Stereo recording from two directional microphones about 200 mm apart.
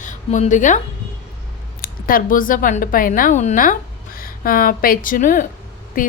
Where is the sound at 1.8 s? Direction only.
45° left (ahead or behind).